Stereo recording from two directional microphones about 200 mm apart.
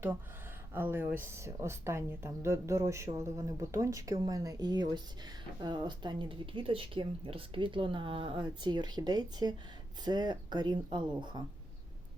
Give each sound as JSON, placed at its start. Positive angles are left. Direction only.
{"t": 0.7, "sound": "a woman's voice", "side_deg": -10}